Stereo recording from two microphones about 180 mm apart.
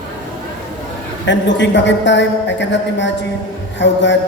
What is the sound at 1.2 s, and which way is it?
A man's voice, 80° left.